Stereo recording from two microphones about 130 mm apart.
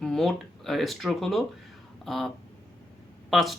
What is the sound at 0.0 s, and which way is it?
Speech, centre (ahead or behind).